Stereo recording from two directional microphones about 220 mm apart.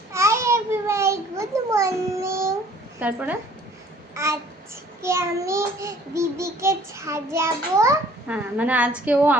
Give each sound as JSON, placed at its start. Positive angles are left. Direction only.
{"t": 0.1, "sound": "babbling", "side_deg": -10}
{"t": 3.0, "sound": "a child's voice", "side_deg": -5}
{"t": 4.1, "sound": "babbling", "side_deg": -15}
{"t": 5.0, "sound": "a child's voice", "side_deg": -10}